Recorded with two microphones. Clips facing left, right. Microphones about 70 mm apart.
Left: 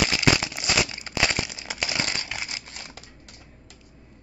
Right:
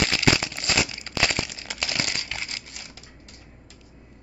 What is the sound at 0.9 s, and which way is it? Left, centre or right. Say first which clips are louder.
Crumpling: even; centre.